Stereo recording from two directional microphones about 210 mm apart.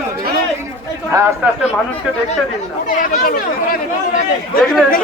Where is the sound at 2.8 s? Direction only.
40° left (ahead or behind).